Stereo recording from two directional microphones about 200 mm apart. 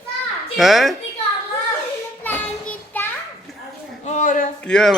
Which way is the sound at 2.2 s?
10° left (ahead or behind).